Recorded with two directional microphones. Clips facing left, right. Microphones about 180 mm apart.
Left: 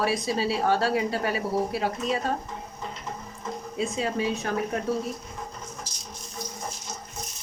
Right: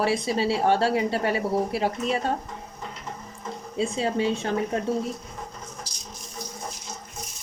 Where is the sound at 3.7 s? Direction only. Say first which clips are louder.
Right 3 dB; 30° right (ahead or behind).